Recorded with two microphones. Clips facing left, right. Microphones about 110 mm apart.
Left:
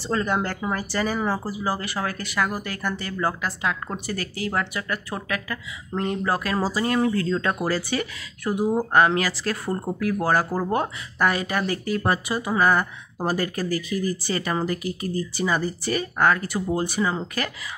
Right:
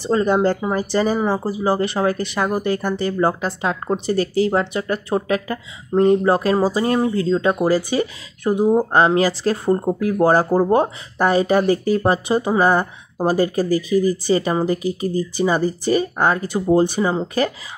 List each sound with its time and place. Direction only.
0.0 s speech: 25° right (ahead or behind)